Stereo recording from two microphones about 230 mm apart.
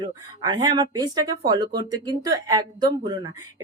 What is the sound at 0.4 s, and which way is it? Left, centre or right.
Speech, centre.